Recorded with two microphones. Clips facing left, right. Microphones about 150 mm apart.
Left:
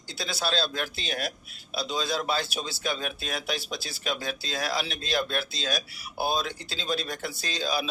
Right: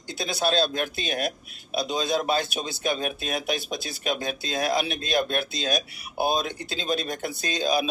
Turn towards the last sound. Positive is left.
turn(degrees=-20)  # may be behind; listen again after turning